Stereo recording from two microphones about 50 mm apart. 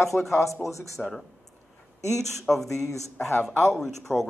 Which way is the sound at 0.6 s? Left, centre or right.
Left.